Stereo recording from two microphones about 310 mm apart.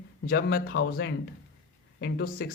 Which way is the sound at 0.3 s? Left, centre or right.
Left.